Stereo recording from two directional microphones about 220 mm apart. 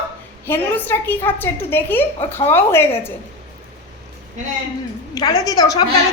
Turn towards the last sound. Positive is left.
turn(degrees=15)  # may be behind; listen again after turning